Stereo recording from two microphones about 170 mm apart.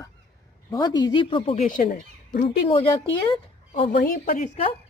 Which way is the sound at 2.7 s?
30° left (ahead or behind).